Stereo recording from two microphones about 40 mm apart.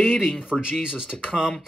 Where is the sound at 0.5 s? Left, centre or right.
Centre.